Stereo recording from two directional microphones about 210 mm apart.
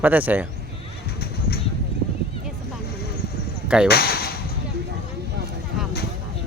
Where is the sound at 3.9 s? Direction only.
50° left (ahead or behind).